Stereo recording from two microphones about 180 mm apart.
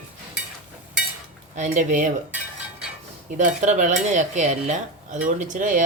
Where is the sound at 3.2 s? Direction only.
45° right (ahead or behind).